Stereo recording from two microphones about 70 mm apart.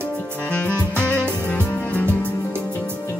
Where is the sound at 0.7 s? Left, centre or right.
Right.